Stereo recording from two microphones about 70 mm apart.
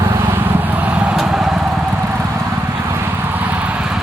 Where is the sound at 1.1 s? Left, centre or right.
Centre.